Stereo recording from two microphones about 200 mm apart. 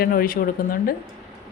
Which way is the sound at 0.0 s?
45° left (ahead or behind).